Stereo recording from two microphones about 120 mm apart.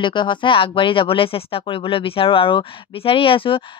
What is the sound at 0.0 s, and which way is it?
Speech, 40° left (ahead or behind).